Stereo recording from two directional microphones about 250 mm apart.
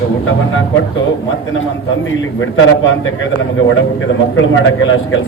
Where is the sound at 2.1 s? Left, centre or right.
Left.